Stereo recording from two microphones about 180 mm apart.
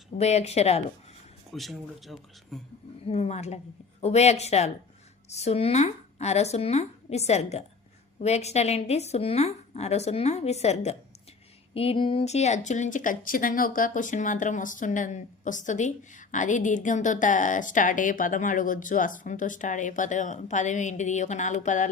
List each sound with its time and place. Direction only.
0.2 s a woman's voice: 35° left (ahead or behind)
1.5 s speech: centre (ahead or behind)
3.1 s a woman's voice: 35° left (ahead or behind)